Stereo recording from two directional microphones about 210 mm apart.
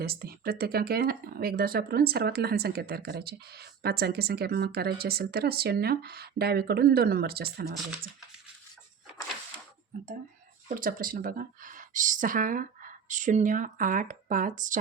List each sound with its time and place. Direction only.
0.0 s speech: 45° right (ahead or behind)
10.7 s speech: 40° right (ahead or behind)